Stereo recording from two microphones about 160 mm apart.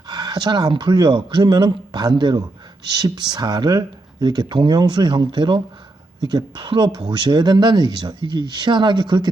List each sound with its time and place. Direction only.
0.1 s speech: 25° right (ahead or behind)